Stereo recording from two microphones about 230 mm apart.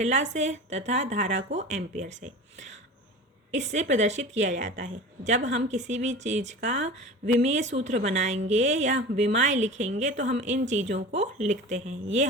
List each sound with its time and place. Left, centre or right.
0.0 s a woman's voice: right